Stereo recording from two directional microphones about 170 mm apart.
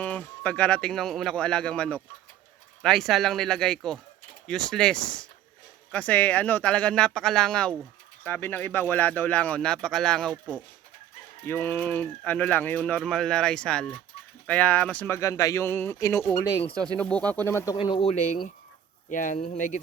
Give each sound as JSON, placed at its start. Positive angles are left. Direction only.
{"t": 0.0, "sound": "speech", "side_deg": 10}
{"t": 11.4, "sound": "speech", "side_deg": 10}
{"t": 17.0, "sound": "speech", "side_deg": 5}
{"t": 17.7, "sound": "speech", "side_deg": 30}
{"t": 18.1, "sound": "speech", "side_deg": 45}